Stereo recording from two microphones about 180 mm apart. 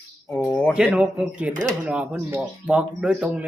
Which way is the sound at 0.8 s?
5° right (ahead or behind).